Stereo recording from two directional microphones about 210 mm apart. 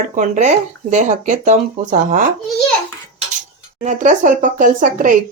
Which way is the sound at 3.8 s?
35° right (ahead or behind).